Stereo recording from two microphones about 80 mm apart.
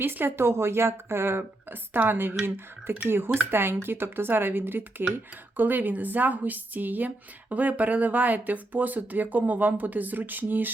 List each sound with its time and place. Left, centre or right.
0.0 s speech: right